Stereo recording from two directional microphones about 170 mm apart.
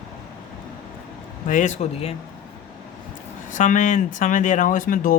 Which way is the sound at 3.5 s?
50° left (ahead or behind).